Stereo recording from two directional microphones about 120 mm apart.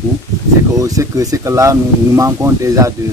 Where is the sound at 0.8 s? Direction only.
25° right (ahead or behind).